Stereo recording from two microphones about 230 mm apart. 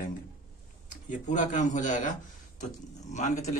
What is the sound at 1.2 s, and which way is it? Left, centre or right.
A man's voice, left.